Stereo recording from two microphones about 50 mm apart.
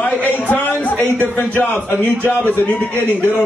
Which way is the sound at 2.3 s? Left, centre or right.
Left.